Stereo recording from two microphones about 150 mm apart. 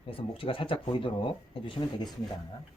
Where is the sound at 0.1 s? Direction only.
35° left (ahead or behind).